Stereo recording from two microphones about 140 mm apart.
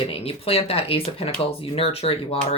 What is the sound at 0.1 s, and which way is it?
Speech, 45° left (ahead or behind).